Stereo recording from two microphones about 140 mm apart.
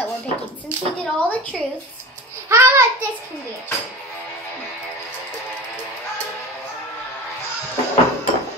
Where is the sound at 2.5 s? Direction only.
15° right (ahead or behind).